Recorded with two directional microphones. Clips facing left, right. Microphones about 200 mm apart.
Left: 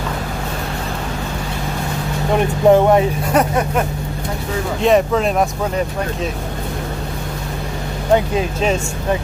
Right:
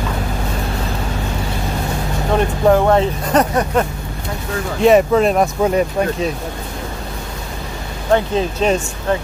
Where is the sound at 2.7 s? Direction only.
15° left (ahead or behind).